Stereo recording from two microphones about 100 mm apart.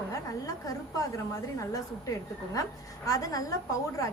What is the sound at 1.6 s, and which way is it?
A woman's voice, 35° left (ahead or behind).